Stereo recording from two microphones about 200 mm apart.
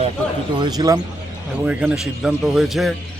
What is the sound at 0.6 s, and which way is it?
Speech, 20° right (ahead or behind).